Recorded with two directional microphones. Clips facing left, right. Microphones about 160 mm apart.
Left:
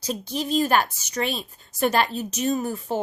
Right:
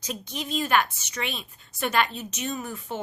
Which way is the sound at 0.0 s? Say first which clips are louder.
Left 6 dB; 35° left (ahead or behind).